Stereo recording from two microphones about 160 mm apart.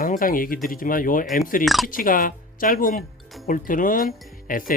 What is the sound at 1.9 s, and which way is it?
Speech, 60° left (ahead or behind).